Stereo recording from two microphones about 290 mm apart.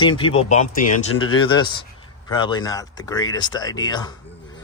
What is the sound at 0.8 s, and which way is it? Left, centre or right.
Speech, left.